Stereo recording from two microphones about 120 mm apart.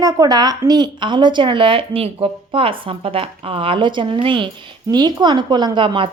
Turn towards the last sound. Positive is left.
turn(degrees=-45)  # may be behind; listen again after turning